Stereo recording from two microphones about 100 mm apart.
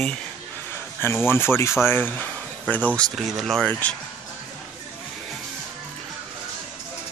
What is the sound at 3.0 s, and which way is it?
Speech, centre (ahead or behind).